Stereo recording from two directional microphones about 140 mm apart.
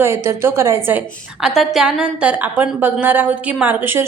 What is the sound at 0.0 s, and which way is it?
A woman's voice, 15° right (ahead or behind).